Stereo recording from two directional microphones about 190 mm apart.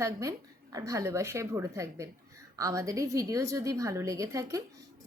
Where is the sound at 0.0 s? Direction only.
15° right (ahead or behind).